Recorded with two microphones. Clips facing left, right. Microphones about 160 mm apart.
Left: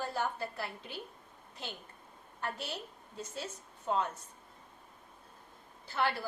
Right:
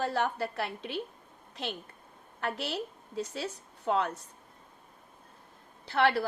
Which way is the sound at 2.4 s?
75° right (ahead or behind).